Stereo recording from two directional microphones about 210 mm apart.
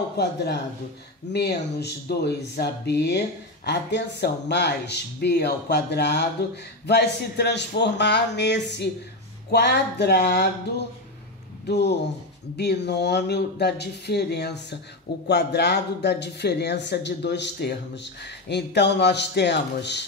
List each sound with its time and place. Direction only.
0.2 s speech: 50° left (ahead or behind)